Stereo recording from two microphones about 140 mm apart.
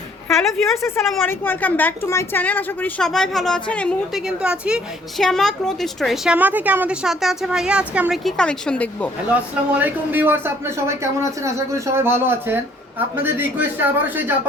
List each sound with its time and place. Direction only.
0.8 s a woman's voice: 20° left (ahead or behind)
4.1 s a woman's voice: 5° right (ahead or behind)
5.2 s a woman's voice: 5° left (ahead or behind)
6.3 s a man's voice: 10° right (ahead or behind)
8.2 s a woman's voice: 5° left (ahead or behind)
9.3 s a man's voice: 10° right (ahead or behind)